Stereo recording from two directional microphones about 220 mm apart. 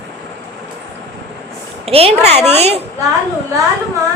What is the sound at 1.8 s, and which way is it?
Speech, 25° right (ahead or behind).